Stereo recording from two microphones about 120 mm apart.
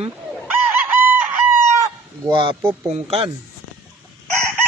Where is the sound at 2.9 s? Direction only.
60° right (ahead or behind).